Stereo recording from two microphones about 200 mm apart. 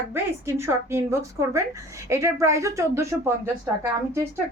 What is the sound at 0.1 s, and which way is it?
A woman's voice, 10° right (ahead or behind).